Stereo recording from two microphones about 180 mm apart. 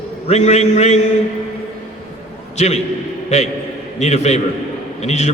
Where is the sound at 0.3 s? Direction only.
40° left (ahead or behind).